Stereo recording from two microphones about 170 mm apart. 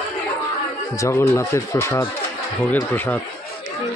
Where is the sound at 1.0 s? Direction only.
15° left (ahead or behind).